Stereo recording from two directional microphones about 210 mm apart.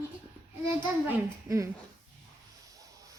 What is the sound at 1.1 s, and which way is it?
Speech, 10° right (ahead or behind).